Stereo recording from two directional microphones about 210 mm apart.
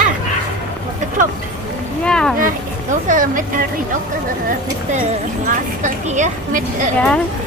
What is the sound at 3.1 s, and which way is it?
Speech, 40° right (ahead or behind).